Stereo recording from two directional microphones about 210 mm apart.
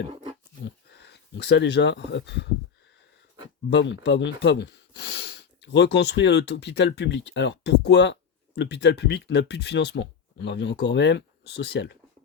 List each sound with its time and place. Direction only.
0.6 s speech: 50° left (ahead or behind)
3.7 s speech: 60° left (ahead or behind)